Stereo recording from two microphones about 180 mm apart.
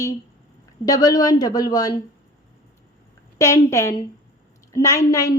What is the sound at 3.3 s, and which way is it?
A woman's voice, 15° left (ahead or behind).